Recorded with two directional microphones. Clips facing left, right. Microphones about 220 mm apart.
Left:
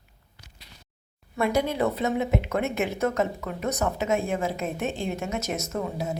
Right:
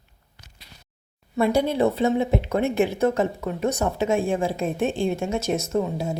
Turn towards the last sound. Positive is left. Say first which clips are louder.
# right 5 dB
turn(degrees=-30)  # may be behind; listen again after turning